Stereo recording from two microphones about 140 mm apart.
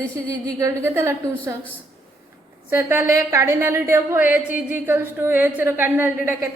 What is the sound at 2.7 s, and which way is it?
A woman's voice, 15° right (ahead or behind).